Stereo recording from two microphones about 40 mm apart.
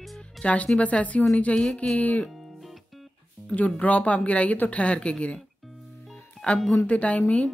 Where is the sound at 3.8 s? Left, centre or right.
Left.